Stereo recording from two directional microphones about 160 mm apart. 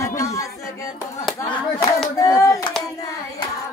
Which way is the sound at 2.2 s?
20° left (ahead or behind).